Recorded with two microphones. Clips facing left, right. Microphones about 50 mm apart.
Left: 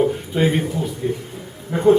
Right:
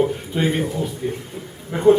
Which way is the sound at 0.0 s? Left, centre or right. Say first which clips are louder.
Left 2 dB; centre.